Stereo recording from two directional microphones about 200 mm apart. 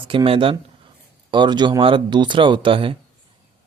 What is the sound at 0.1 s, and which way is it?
Speech, 25° right (ahead or behind).